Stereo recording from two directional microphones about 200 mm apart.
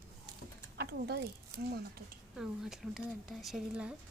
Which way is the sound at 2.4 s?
Centre (ahead or behind).